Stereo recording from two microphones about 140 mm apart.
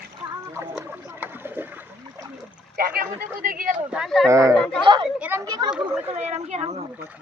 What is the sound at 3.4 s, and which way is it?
Speech, 80° right.